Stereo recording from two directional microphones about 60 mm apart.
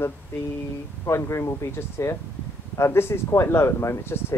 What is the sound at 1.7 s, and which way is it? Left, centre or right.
Speech, left.